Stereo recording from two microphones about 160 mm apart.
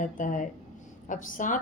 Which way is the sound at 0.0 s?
55° left (ahead or behind).